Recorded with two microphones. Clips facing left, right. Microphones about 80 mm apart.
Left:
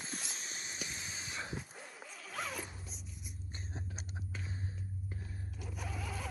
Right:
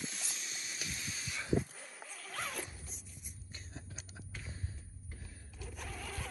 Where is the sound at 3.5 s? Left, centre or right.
Left.